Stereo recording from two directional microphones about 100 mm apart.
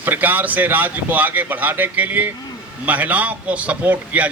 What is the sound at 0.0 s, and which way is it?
A man's voice, 20° right (ahead or behind).